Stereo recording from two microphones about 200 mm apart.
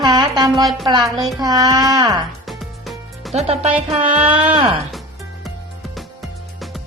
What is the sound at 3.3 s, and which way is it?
Speech, 30° right (ahead or behind).